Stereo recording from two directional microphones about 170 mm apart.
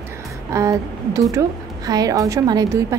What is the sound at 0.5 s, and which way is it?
A woman's voice, 20° right (ahead or behind).